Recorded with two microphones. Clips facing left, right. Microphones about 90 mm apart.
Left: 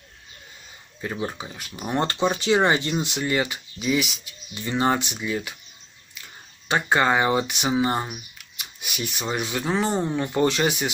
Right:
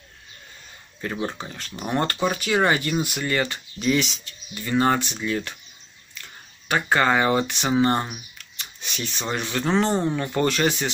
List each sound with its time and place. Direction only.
1.1 s speech: 10° left (ahead or behind)
6.7 s speech: 20° left (ahead or behind)